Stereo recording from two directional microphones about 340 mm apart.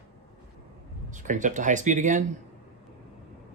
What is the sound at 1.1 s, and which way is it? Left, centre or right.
Speech, right.